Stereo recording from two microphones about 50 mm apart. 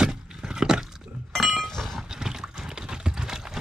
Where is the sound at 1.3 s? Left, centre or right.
Centre.